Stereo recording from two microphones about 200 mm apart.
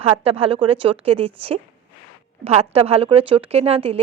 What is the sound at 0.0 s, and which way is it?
A woman's voice, 30° right (ahead or behind).